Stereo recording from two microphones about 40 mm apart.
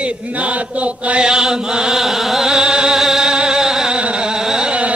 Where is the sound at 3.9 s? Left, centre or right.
Right.